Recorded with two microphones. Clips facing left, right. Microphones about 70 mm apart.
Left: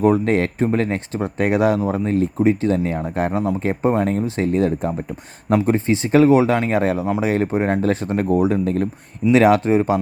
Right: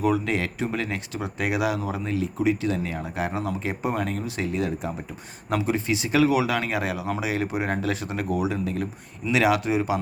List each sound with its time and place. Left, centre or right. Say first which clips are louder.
0.0 s speech: left 7 dB; left